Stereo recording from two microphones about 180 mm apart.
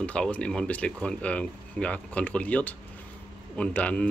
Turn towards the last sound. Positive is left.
turn(degrees=10)  # may be behind; listen again after turning